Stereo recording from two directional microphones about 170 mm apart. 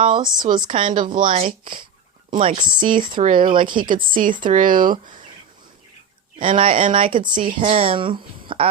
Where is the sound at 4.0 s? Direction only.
50° right (ahead or behind).